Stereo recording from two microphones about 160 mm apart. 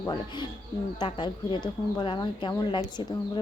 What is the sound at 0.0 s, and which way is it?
A woman's voice, 25° left (ahead or behind).